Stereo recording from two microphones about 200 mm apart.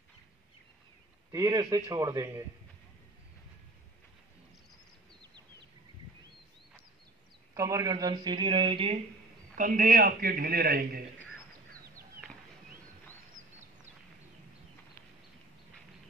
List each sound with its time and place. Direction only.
1.3 s a man's voice: 20° right (ahead or behind)
7.5 s speech: 15° right (ahead or behind)
9.6 s a man's voice: 45° right (ahead or behind)